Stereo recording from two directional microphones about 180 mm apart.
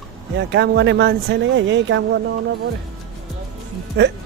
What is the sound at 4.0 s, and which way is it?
Speech, 80° right.